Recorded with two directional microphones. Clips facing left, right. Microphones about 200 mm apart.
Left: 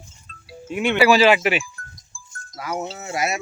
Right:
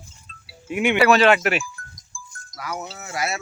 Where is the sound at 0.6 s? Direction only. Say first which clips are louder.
Right 1 dB; 10° right (ahead or behind).